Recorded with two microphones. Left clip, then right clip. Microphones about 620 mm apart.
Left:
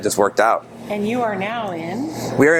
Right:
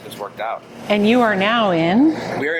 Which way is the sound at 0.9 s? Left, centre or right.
Right.